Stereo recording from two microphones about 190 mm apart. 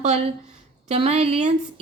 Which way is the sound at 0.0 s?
35° right (ahead or behind).